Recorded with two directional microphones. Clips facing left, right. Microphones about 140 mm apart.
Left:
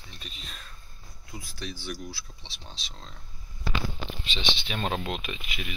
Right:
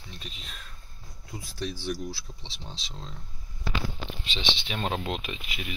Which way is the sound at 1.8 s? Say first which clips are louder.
Right 5 dB; 25° right (ahead or behind).